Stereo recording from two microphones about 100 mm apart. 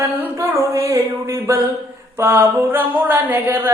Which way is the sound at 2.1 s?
25° right (ahead or behind).